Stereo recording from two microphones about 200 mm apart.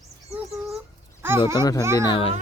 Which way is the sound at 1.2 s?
10° right (ahead or behind).